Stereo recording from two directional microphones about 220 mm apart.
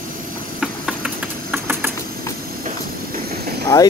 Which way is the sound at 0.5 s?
5° right (ahead or behind).